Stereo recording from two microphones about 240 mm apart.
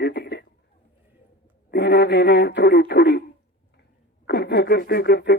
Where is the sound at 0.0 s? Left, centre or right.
Left.